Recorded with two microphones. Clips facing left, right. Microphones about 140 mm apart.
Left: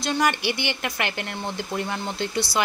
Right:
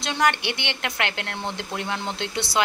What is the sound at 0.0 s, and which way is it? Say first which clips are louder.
Speech: even; 5° left (ahead or behind).